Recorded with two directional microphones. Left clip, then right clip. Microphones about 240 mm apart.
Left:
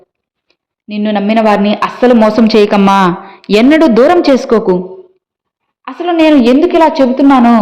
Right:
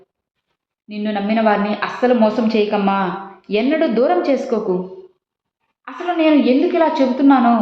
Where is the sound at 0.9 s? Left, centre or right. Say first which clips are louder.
Left 8 dB; left.